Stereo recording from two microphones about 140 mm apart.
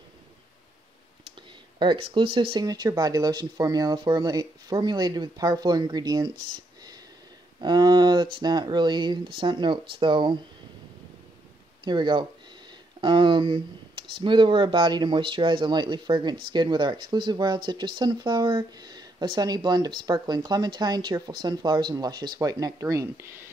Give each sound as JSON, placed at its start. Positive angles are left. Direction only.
{"t": 1.8, "sound": "speech", "side_deg": -35}
{"t": 2.6, "sound": "speech", "side_deg": -25}
{"t": 7.6, "sound": "speech", "side_deg": -30}
{"t": 11.8, "sound": "speech", "side_deg": -35}